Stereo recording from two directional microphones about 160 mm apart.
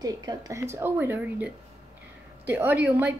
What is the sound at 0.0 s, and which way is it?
Speech, 25° right (ahead or behind).